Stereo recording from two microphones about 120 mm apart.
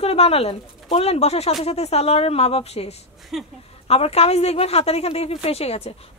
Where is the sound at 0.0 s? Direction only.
55° left (ahead or behind).